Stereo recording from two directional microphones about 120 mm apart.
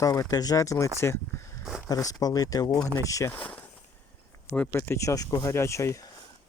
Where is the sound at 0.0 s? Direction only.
30° left (ahead or behind).